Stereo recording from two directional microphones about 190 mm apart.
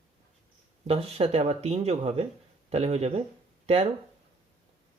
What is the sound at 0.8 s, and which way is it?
Speech, 30° right (ahead or behind).